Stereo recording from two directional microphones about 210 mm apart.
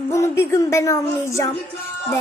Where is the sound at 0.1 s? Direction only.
15° left (ahead or behind).